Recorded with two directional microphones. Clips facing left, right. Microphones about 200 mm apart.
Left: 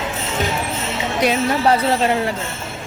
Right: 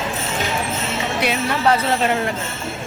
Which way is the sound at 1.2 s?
35° left (ahead or behind).